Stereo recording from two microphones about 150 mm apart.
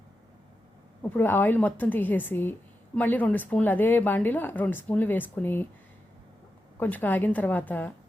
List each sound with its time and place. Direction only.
1.1 s a woman's voice: 15° left (ahead or behind)
6.7 s a woman's voice: 10° left (ahead or behind)